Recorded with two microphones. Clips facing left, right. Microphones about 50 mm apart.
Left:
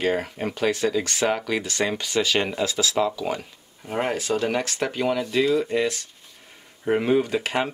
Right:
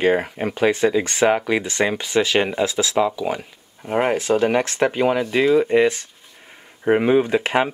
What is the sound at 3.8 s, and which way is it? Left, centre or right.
Speech, right.